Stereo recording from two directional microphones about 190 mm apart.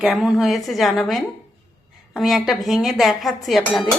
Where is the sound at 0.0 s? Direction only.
5° right (ahead or behind).